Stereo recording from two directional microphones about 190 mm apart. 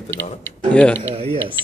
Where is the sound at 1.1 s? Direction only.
30° right (ahead or behind).